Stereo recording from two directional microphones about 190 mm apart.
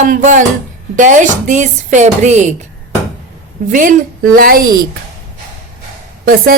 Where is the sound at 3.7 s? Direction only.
45° right (ahead or behind).